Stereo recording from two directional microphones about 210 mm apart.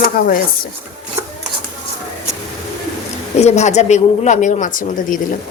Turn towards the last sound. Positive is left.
turn(degrees=40)  # may be behind; listen again after turning